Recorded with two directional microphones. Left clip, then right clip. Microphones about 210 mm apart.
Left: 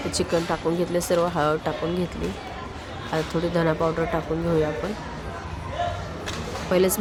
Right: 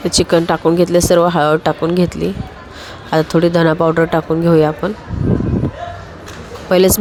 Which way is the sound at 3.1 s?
40° right (ahead or behind).